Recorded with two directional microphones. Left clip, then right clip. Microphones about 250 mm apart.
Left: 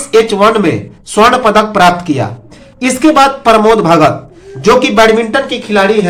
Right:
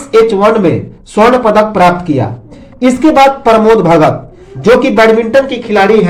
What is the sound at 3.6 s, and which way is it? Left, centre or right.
A man's voice, left.